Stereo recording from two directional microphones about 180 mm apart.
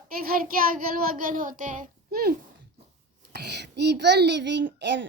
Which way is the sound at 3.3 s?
65° right (ahead or behind).